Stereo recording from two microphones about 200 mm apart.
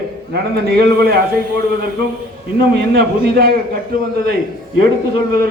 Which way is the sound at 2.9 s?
50° right (ahead or behind).